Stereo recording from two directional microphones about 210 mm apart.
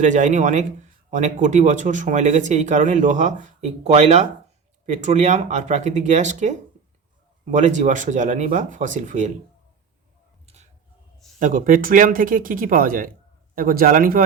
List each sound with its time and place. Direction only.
0.0 s speech: 35° right (ahead or behind)
10.4 s a sound: 30° right (ahead or behind)
11.3 s a man's voice: 40° right (ahead or behind)